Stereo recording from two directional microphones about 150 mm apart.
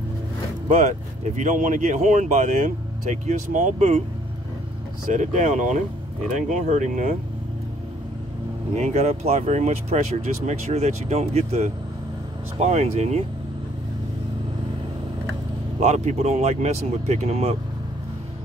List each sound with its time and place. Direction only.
0.7 s speech: 55° right (ahead or behind)
5.1 s speech: 55° right (ahead or behind)
8.7 s speech: 50° right (ahead or behind)
15.8 s speech: 50° right (ahead or behind)